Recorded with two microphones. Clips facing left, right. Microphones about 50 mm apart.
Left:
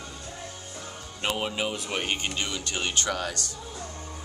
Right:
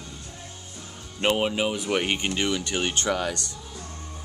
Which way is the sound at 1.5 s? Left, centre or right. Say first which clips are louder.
Right 5 dB; centre.